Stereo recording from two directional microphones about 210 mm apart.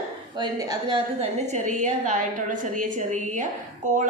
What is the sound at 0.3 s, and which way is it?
A woman's voice, 20° right (ahead or behind).